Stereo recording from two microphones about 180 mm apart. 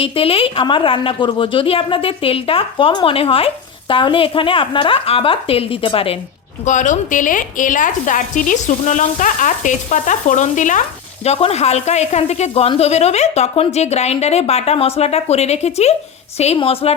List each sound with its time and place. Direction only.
0.0 s a woman's voice: 30° left (ahead or behind)
6.7 s a woman's voice: 45° left (ahead or behind)